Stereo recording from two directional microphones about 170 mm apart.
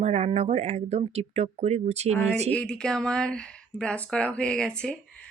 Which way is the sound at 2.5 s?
5° left (ahead or behind).